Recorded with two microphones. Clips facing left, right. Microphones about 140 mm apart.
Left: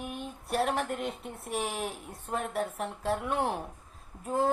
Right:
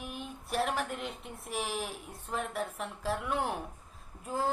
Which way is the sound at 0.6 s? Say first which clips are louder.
Left 3 dB; 45° left (ahead or behind).